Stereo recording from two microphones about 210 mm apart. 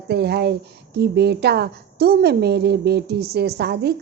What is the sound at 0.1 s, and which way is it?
A woman's voice, 50° right (ahead or behind).